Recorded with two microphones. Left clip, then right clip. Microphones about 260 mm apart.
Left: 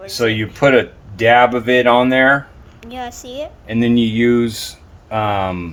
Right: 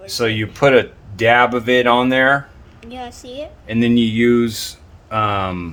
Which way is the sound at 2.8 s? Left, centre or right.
Centre.